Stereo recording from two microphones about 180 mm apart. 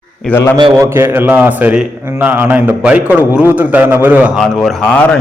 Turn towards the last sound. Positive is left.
turn(degrees=0)  # may be behind; listen again after turning